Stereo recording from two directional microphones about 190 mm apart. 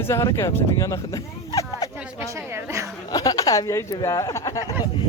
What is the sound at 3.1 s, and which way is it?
Speech, 20° left (ahead or behind).